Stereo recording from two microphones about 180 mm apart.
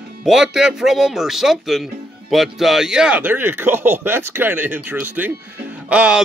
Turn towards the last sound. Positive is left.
turn(degrees=-5)  # may be behind; listen again after turning